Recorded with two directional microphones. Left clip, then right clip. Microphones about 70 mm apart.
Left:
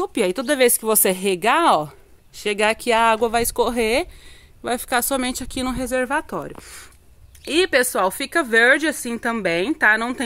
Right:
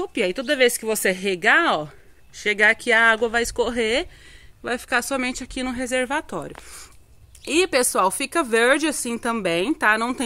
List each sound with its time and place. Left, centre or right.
0.0 s speech: left
1.1 s speech: left
2.3 s speech: left
5.9 s speech: centre
7.4 s speech: right